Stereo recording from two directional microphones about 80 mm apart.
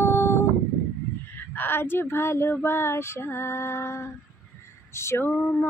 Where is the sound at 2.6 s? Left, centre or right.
Left.